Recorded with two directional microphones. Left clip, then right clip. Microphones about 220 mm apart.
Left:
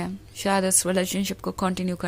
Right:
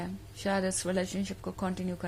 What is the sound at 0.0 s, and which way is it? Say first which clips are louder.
A woman's voice: left 7 dB; 30° left (ahead or behind).